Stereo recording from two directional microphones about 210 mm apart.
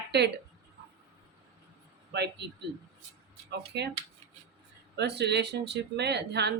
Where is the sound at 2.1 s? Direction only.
55° right (ahead or behind).